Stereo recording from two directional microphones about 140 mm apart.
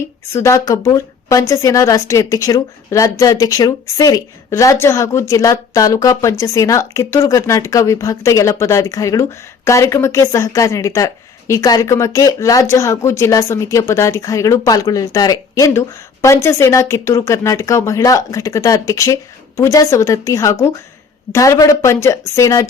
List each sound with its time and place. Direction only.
0.0 s speech: 20° left (ahead or behind)